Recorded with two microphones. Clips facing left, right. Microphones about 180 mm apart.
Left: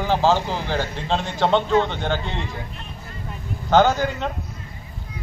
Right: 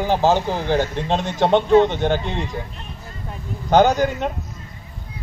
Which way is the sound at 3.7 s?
15° right (ahead or behind).